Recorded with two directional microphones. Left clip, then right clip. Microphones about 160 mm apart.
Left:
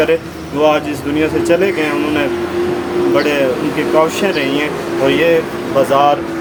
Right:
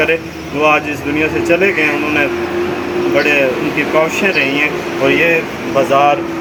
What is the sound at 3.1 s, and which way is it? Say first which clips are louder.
Speech: right 3 dB; 20° left (ahead or behind).